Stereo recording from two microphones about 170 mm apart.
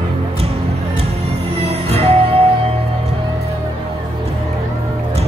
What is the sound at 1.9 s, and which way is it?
Music, 35° right (ahead or behind).